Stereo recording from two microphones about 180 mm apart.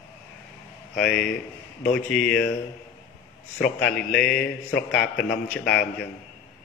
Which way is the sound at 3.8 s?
5° left (ahead or behind).